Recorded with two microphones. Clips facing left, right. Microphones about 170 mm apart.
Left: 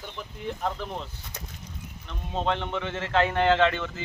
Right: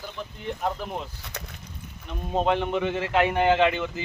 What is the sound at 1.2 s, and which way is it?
Speech, 70° right (ahead or behind).